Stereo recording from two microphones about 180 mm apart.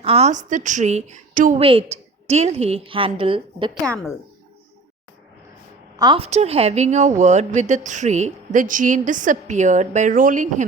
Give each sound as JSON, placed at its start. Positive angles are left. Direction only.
{"t": 0.0, "sound": "a woman's voice", "side_deg": -35}
{"t": 1.5, "sound": "a woman's voice", "side_deg": -30}
{"t": 3.8, "sound": "speech", "side_deg": 5}
{"t": 6.0, "sound": "a woman's voice", "side_deg": -30}